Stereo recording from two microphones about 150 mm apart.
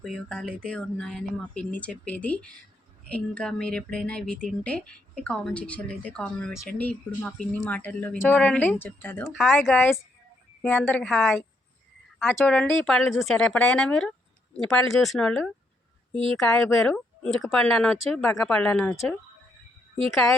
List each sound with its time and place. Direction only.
0.0 s speech: centre (ahead or behind)
12.4 s speech: 10° left (ahead or behind)
16.1 s speech: 35° right (ahead or behind)
16.4 s speech: 5° left (ahead or behind)